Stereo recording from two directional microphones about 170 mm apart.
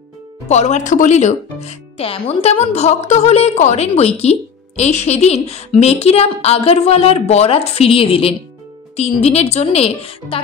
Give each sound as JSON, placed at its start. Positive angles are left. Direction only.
{"t": 0.5, "sound": "speech", "side_deg": 40}